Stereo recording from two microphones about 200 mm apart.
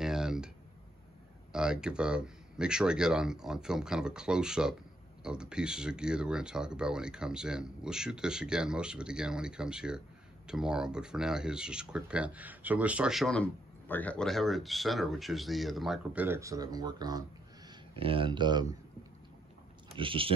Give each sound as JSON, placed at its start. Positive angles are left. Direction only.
{"t": 0.0, "sound": "a sound", "side_deg": 0}
{"t": 1.5, "sound": "speech", "side_deg": -5}
{"t": 20.0, "sound": "speech", "side_deg": -25}